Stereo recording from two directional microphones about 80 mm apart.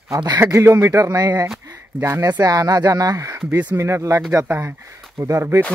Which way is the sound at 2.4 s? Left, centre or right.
Right.